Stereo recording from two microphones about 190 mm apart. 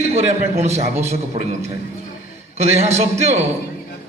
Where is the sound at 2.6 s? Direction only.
35° right (ahead or behind).